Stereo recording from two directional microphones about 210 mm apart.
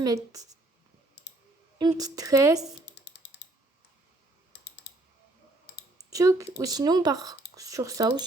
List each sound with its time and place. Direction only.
0.0 s speech: 15° right (ahead or behind)
1.8 s speech: 15° right (ahead or behind)
2.8 s a sound: 55° left (ahead or behind)
4.5 s typing: 50° left (ahead or behind)
6.1 s speech: 15° right (ahead or behind)